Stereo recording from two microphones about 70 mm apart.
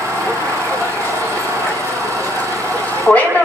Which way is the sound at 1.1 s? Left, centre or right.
Right.